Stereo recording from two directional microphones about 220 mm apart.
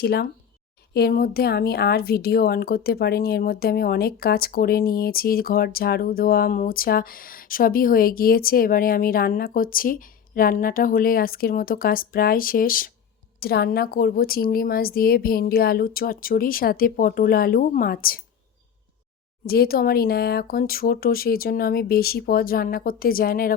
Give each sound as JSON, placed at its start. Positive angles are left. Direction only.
{"t": 0.0, "sound": "a woman's voice", "side_deg": 45}
{"t": 19.5, "sound": "a woman's voice", "side_deg": 45}